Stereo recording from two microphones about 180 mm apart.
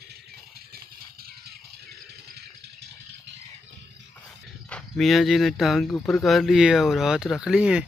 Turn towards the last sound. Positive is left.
turn(degrees=-5)  # may be behind; listen again after turning